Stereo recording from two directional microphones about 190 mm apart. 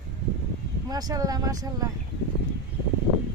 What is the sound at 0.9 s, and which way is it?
Speech, 20° right (ahead or behind).